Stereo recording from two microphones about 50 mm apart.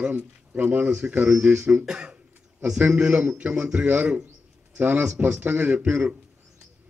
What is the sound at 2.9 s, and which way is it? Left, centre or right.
Speech, centre.